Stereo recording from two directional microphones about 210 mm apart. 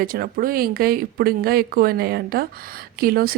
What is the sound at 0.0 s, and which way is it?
Speech, 45° right (ahead or behind).